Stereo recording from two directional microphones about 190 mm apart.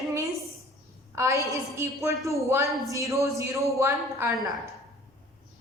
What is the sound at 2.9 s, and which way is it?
A woman's voice, 15° right (ahead or behind).